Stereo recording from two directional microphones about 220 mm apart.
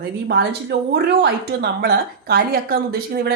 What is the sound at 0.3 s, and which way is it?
A woman's voice, 50° right (ahead or behind).